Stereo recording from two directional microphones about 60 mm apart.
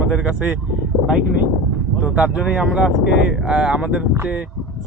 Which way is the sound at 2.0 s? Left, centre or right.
Centre.